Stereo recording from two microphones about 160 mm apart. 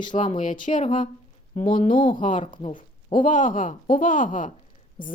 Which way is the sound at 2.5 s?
35° left (ahead or behind).